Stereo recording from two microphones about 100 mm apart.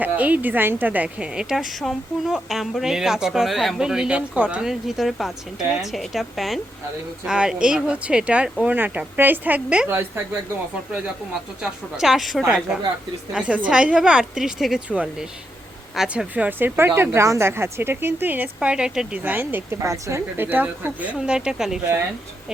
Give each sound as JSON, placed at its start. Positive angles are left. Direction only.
{"t": 0.0, "sound": "a woman's voice", "side_deg": -15}
{"t": 4.6, "sound": "a woman's voice", "side_deg": -5}
{"t": 11.6, "sound": "a woman's voice", "side_deg": -5}